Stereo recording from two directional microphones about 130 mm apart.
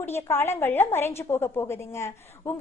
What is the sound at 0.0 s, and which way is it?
A woman's voice, 20° left (ahead or behind).